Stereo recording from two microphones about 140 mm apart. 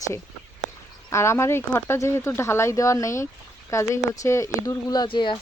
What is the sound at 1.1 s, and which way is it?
Speech, 20° left (ahead or behind).